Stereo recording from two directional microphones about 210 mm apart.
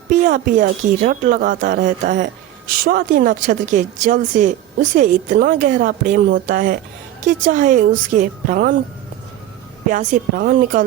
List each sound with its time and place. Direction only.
0.1 s a woman's voice: 40° right (ahead or behind)
9.9 s a woman's voice: 40° right (ahead or behind)